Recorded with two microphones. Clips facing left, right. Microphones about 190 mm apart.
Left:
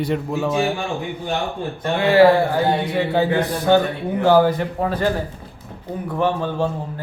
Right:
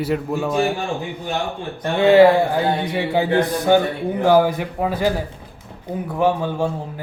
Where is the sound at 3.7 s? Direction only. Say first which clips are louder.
Left 2 dB; 15° right (ahead or behind).